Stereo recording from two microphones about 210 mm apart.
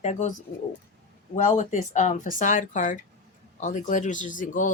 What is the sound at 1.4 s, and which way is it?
Speech, 35° left (ahead or behind).